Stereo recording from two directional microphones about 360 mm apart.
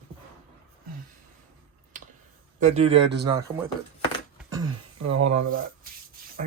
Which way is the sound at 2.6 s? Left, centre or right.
Centre.